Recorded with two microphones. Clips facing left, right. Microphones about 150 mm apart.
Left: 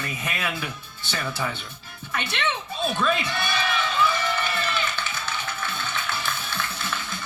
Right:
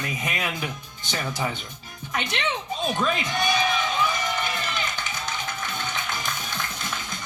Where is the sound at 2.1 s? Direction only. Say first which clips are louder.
Even; 15° right (ahead or behind).